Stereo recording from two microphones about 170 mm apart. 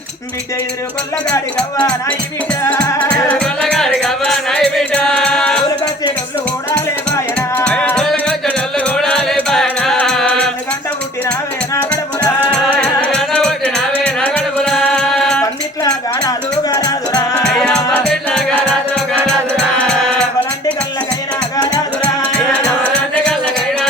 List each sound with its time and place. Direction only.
1.5 s speech: 10° left (ahead or behind)
2.6 s music: 5° left (ahead or behind)
7.3 s music: 5° left (ahead or behind)
12.7 s music: 5° left (ahead or behind)
15.8 s music: 20° left (ahead or behind)
17.4 s music: 5° left (ahead or behind)
22.0 s music: 10° left (ahead or behind)